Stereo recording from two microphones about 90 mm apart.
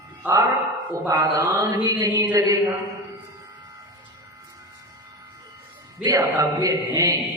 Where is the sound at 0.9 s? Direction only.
50° right (ahead or behind).